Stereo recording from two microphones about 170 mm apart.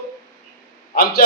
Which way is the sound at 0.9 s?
65° left (ahead or behind).